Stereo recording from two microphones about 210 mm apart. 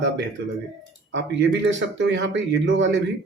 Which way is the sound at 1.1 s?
60° right (ahead or behind).